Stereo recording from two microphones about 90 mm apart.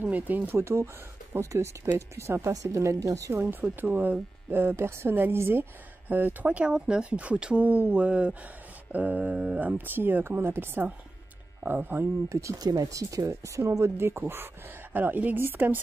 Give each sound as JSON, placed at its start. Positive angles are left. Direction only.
{"t": 0.0, "sound": "speech", "side_deg": -20}
{"t": 3.3, "sound": "speech", "side_deg": -20}
{"t": 12.3, "sound": "speech", "side_deg": -35}